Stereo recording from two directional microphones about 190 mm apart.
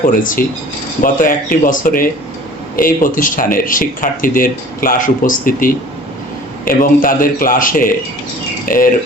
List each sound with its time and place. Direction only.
0.0 s speech: 45° left (ahead or behind)
8.6 s cricket: 50° left (ahead or behind)